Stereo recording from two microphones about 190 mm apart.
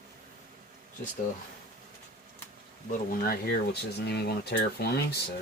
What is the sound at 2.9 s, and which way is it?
Speech, 55° left (ahead or behind).